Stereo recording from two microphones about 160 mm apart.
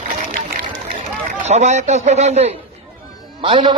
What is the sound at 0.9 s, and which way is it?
Speech, 45° right (ahead or behind).